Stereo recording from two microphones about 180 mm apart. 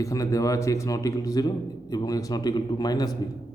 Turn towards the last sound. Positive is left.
turn(degrees=20)  # may be behind; listen again after turning